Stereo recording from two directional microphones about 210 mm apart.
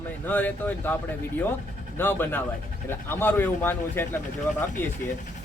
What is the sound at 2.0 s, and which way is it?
A man's voice, 10° left (ahead or behind).